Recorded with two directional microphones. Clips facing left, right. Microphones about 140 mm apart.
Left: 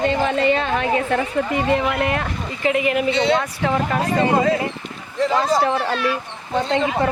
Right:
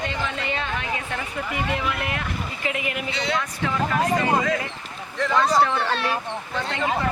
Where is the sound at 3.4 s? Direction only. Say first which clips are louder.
Left 4 dB; 45° left (ahead or behind); by 5.8 s 25° left (ahead or behind).